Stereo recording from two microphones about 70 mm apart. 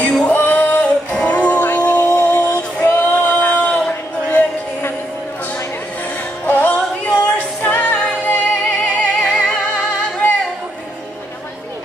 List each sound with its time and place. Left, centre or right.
0.0 s music: centre
2.8 s male singing: left
3.7 s a sound: left
6.4 s music: left